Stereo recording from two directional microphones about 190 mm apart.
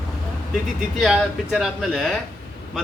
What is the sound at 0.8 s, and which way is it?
Speech, 5° right (ahead or behind).